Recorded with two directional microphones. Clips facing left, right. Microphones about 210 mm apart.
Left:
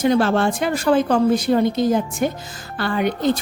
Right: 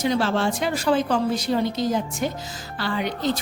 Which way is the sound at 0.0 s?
55° left (ahead or behind).